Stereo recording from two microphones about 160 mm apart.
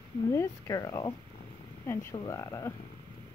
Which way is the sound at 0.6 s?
25° left (ahead or behind).